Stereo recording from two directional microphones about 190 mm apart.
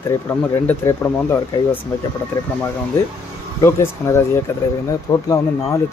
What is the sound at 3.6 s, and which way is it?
Speech, 15° left (ahead or behind).